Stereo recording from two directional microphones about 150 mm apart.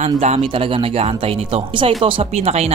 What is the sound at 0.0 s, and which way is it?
Speech, 45° right (ahead or behind).